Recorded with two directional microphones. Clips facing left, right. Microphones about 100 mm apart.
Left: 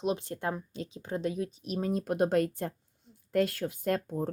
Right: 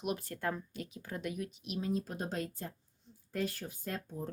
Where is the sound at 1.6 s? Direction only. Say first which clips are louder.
Left 4 dB; 45° left (ahead or behind); by 2.7 s 60° left (ahead or behind).